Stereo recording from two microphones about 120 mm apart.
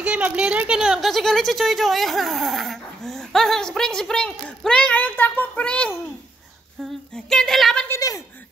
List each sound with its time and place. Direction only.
0.0 s speech: 10° right (ahead or behind)
7.9 s speech: 30° left (ahead or behind)